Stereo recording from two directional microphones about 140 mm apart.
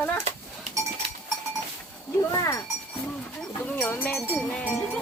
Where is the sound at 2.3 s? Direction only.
20° left (ahead or behind).